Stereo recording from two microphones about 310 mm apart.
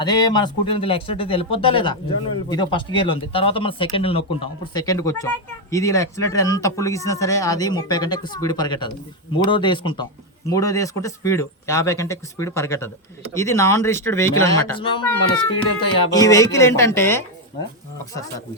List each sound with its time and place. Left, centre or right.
0.0 s speech: centre